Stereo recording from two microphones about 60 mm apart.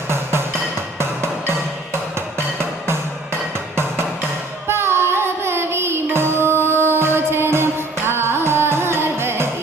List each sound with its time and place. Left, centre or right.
0.1 s music: right
4.7 s carnatic music: right